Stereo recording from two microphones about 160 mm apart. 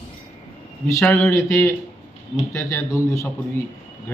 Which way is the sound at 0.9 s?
15° left (ahead or behind).